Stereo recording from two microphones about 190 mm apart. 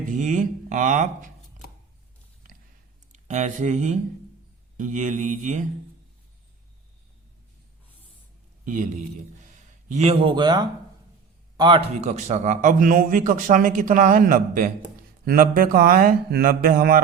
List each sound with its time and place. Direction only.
0.0 s speech: 40° right (ahead or behind)
3.1 s speech: 40° right (ahead or behind)
8.6 s a man's voice: 40° right (ahead or behind); by 11.8 s 25° right (ahead or behind)
11.9 s a man's voice: 35° right (ahead or behind)